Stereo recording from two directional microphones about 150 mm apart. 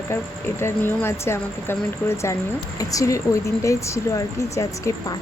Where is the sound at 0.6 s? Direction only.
15° left (ahead or behind).